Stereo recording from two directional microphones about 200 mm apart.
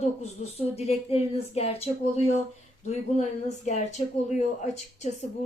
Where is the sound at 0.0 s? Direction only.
30° left (ahead or behind).